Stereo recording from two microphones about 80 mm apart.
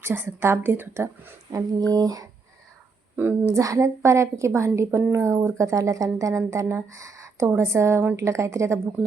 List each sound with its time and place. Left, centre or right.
0.0 s a woman's voice: right
1.5 s speech: right
3.5 s speech: right